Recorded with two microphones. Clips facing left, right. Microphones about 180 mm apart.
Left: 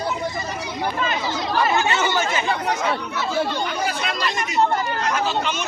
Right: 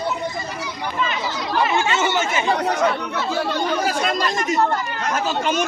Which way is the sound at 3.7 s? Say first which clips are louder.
Right 4 dB; 40° right (ahead or behind).